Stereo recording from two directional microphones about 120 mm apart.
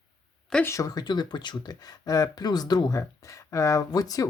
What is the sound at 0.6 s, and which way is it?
Speech, 25° left (ahead or behind).